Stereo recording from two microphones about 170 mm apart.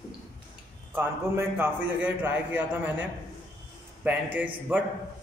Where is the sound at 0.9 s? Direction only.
10° right (ahead or behind).